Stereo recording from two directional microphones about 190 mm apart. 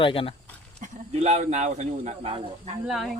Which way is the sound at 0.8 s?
40° right (ahead or behind).